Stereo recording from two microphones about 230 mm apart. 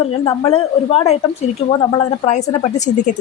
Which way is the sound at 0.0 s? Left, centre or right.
Left.